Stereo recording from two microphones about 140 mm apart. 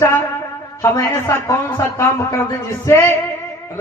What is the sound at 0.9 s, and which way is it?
A man's voice, 25° left (ahead or behind).